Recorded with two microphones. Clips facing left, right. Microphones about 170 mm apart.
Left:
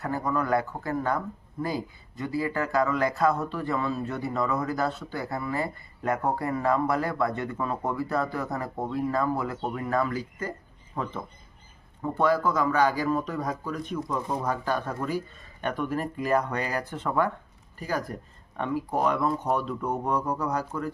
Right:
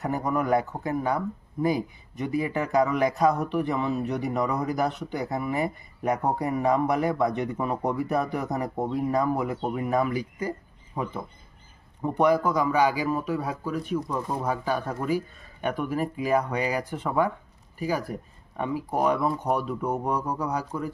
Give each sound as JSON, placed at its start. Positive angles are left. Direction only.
{"t": 0.0, "sound": "speech", "side_deg": -20}